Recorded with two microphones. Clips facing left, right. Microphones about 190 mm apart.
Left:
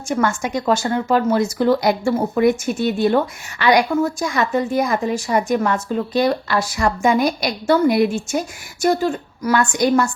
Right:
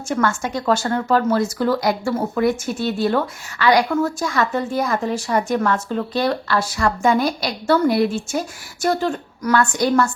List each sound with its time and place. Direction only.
0.1 s a woman's voice: 15° left (ahead or behind)